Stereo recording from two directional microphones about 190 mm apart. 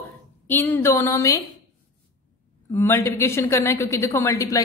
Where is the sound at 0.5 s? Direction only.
10° left (ahead or behind).